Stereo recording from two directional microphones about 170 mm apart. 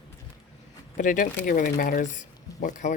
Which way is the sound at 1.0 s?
50° left (ahead or behind).